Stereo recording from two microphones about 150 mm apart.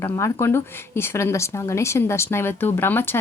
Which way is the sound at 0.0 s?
20° left (ahead or behind).